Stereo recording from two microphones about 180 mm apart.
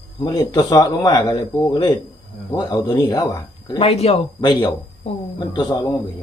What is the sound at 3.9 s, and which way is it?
Speech, 35° left (ahead or behind).